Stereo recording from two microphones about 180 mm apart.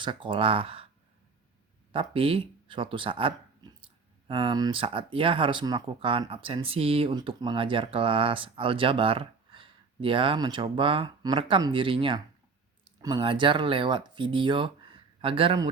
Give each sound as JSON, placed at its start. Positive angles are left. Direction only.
{"t": 0.0, "sound": "speech", "side_deg": -25}
{"t": 1.9, "sound": "speech", "side_deg": -30}